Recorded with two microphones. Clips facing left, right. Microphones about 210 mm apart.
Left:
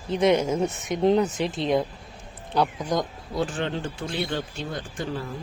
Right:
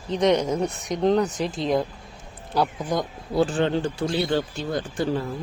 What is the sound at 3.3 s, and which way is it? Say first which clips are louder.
Speech: right 6 dB; 35° right (ahead or behind).